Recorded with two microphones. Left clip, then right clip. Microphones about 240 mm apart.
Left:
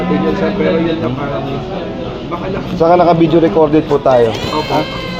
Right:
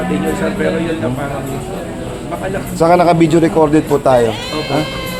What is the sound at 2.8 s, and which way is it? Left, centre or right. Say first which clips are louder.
Speech: left 1 dB; right.